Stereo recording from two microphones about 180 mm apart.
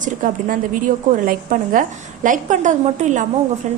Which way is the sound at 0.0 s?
45° right (ahead or behind).